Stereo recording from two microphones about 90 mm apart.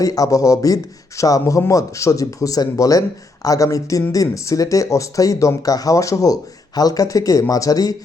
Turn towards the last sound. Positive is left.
turn(degrees=45)  # may be behind; listen again after turning